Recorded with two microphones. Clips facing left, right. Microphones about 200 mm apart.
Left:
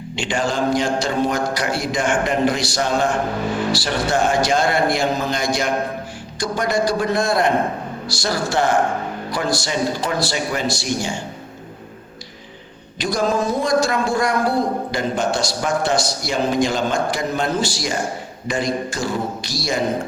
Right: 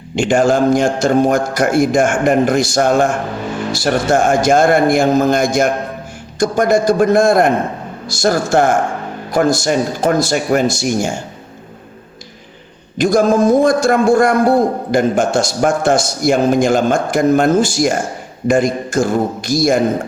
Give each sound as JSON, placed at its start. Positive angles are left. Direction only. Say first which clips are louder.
{"t": 0.2, "sound": "a man's voice", "louder": "right 9 dB", "side_deg": -45}
{"t": 13.0, "sound": "a man's voice", "louder": "right 8 dB", "side_deg": -50}